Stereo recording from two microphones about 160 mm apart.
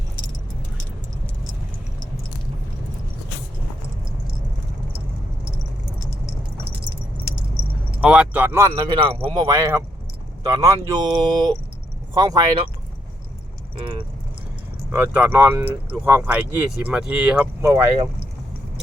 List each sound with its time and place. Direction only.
8.0 s speech: 5° right (ahead or behind); by 12.6 s 25° right (ahead or behind)
14.9 s speech: 10° right (ahead or behind)